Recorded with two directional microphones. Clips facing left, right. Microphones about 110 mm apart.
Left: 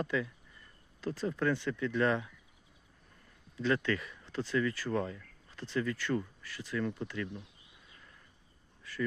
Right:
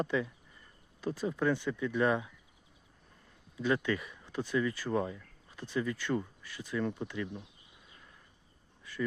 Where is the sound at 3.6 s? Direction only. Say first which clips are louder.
Even; 15° right (ahead or behind).